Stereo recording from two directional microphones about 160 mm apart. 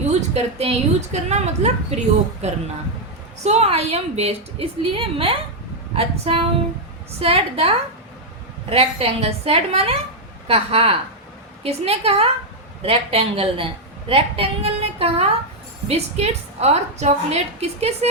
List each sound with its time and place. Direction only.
0.1 s a woman's voice: 45° right (ahead or behind)
8.7 s a woman's voice: 35° right (ahead or behind)